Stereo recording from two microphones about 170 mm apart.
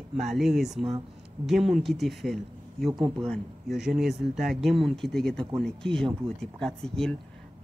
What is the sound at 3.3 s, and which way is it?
Speech, centre (ahead or behind).